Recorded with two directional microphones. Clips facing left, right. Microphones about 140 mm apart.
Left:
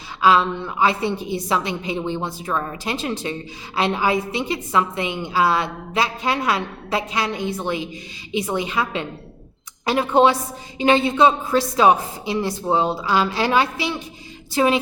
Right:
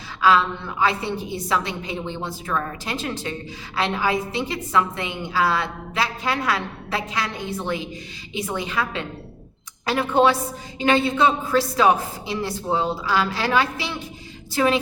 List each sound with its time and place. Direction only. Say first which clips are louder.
0.2 s a woman's voice: left 2 dB; 20° left (ahead or behind)